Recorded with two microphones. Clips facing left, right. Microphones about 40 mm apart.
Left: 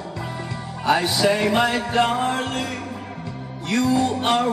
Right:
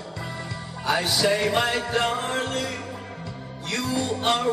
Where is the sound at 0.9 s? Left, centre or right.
Centre.